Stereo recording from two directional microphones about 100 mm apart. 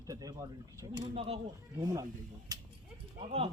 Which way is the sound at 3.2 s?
90° right.